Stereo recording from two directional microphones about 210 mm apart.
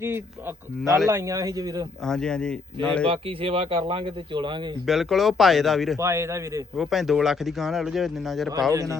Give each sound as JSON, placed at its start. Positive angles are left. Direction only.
{"t": 0.0, "sound": "a man's voice", "side_deg": -10}
{"t": 2.0, "sound": "speech", "side_deg": 5}
{"t": 3.1, "sound": "speech", "side_deg": -25}
{"t": 4.9, "sound": "speech", "side_deg": 0}
{"t": 6.0, "sound": "a man's voice", "side_deg": -15}
{"t": 6.7, "sound": "speech", "side_deg": 0}
{"t": 8.7, "sound": "a man's voice", "side_deg": -15}